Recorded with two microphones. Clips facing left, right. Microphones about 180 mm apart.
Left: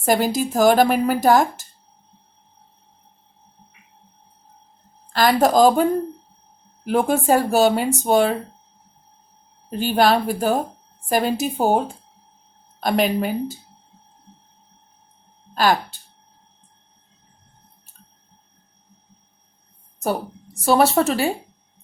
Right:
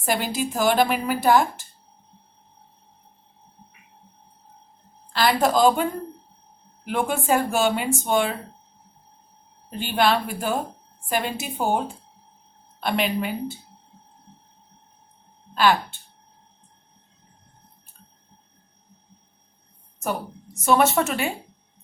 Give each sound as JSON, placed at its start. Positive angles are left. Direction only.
{"t": 0.0, "sound": "a woman's voice", "side_deg": 40}
{"t": 5.1, "sound": "a woman's voice", "side_deg": 45}
{"t": 9.6, "sound": "a woman's voice", "side_deg": 40}
{"t": 12.8, "sound": "a woman's voice", "side_deg": 40}
{"t": 15.5, "sound": "speech", "side_deg": 40}
{"t": 20.0, "sound": "a woman's voice", "side_deg": 35}